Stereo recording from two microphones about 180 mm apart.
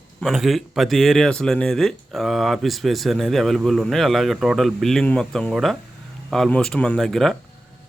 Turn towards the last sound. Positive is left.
turn(degrees=0)  # may be behind; listen again after turning